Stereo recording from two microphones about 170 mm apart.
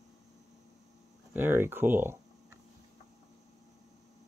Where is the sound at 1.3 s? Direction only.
15° right (ahead or behind).